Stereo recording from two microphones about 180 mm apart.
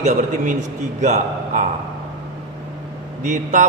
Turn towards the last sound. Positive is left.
turn(degrees=-45)  # may be behind; listen again after turning